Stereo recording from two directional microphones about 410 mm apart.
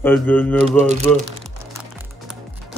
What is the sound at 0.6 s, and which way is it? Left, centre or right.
Speech, centre.